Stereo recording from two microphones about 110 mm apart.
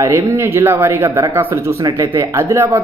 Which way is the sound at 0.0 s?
25° right (ahead or behind).